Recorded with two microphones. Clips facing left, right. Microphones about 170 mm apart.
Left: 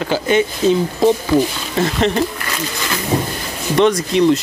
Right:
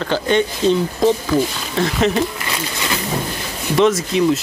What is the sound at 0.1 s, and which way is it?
Speech, 5° left (ahead or behind).